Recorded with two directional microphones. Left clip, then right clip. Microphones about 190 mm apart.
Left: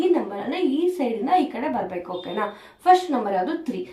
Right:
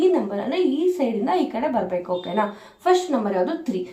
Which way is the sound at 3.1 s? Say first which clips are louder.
Right 1 dB; 30° right (ahead or behind).